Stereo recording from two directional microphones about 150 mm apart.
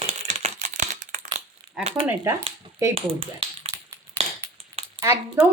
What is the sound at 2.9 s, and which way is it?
Speech, 40° right (ahead or behind).